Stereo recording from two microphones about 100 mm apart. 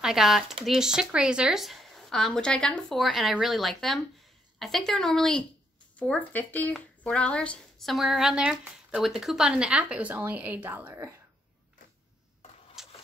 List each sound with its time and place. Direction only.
0.0 s speech: 5° right (ahead or behind)
5.9 s speech: 15° left (ahead or behind)
7.8 s a woman's voice: centre (ahead or behind); by 11.1 s 25° right (ahead or behind)
12.8 s a sound: 5° right (ahead or behind)